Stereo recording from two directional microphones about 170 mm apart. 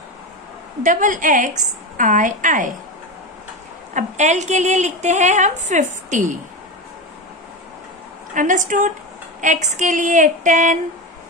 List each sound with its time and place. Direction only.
0.8 s a woman's voice: 50° right (ahead or behind)
3.9 s a woman's voice: 45° right (ahead or behind)
8.4 s a woman's voice: 50° right (ahead or behind)